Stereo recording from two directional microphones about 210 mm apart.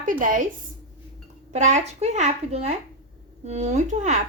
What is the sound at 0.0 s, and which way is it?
Speech, 40° right (ahead or behind).